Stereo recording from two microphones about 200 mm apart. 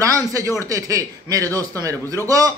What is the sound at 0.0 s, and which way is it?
A man's voice, 15° right (ahead or behind).